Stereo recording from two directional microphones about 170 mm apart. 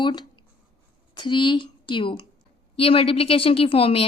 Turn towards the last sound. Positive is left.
turn(degrees=35)  # may be behind; listen again after turning